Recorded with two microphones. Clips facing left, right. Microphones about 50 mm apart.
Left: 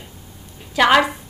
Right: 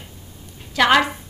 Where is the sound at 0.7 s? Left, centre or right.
Centre.